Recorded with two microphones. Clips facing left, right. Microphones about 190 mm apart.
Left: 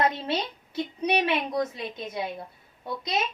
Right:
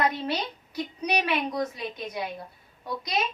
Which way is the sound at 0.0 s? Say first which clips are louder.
Left 1 dB; 25° left (ahead or behind).